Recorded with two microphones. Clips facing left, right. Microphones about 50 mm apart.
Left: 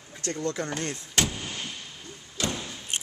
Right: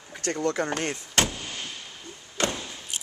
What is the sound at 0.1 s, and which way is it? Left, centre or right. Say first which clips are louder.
Speech: right 4 dB; right.